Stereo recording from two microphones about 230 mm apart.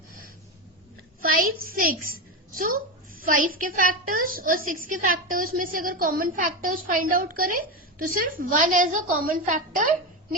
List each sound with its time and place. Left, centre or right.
1.2 s a child's voice: right
2.5 s a sound: right
3.2 s a woman's voice: right